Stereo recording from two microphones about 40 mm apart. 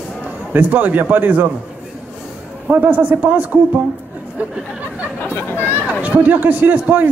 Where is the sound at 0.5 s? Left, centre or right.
Right.